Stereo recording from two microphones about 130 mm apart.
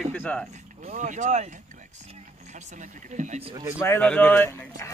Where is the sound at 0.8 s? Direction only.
70° right (ahead or behind).